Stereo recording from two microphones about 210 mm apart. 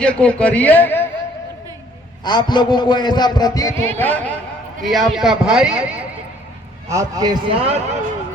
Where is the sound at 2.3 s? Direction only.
20° left (ahead or behind); by 6.0 s 5° right (ahead or behind).